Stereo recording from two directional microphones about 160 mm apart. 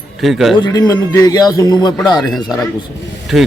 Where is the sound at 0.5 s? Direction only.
25° left (ahead or behind).